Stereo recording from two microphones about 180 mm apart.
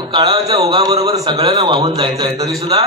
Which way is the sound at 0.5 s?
20° right (ahead or behind).